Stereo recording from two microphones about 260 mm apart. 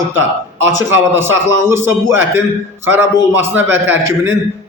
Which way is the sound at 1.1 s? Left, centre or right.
Centre.